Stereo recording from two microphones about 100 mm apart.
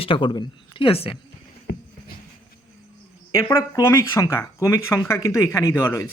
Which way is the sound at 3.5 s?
30° left (ahead or behind).